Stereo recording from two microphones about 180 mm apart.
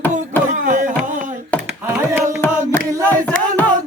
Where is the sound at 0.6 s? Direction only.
45° right (ahead or behind).